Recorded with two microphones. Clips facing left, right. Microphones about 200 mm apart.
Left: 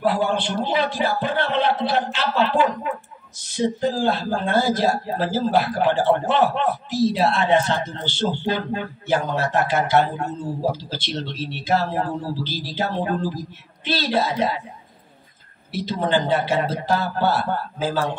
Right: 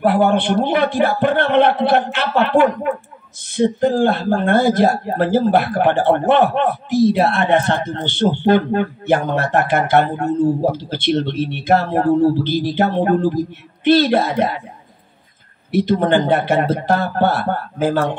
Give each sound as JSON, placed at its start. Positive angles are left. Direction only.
{"t": 0.0, "sound": "speech", "side_deg": -60}
{"t": 15.7, "sound": "speech", "side_deg": -60}